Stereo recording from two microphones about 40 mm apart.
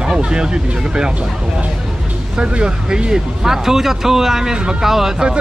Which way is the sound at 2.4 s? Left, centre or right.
Right.